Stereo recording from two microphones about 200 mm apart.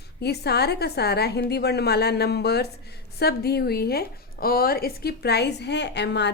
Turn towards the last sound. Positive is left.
turn(degrees=60)  # may be behind; listen again after turning